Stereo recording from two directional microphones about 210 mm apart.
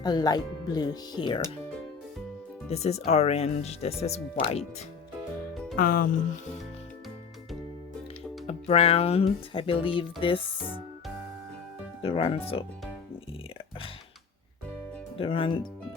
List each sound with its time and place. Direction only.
0.0 s speech: 20° left (ahead or behind)
2.6 s speech: 30° left (ahead or behind)
5.7 s speech: 40° left (ahead or behind)
8.4 s speech: 30° left (ahead or behind)
12.0 s speech: 25° left (ahead or behind)
15.2 s speech: 25° left (ahead or behind)